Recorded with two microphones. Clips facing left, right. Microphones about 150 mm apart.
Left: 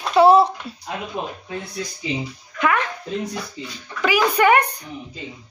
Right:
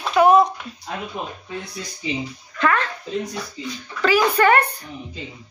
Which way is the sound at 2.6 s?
15° left (ahead or behind).